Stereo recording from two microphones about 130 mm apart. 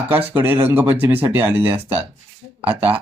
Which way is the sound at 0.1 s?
15° right (ahead or behind).